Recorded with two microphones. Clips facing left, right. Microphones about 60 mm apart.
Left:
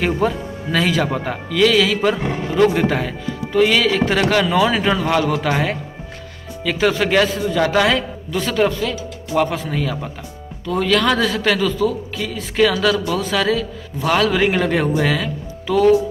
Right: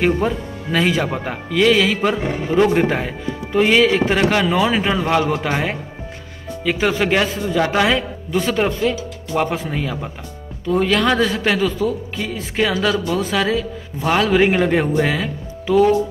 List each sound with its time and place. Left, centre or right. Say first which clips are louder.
0.0 s speech: right 1 dB; centre